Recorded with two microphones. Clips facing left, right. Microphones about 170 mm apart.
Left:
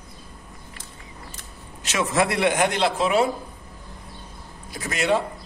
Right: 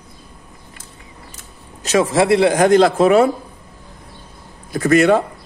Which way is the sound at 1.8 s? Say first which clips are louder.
Right 8 dB; 35° right (ahead or behind).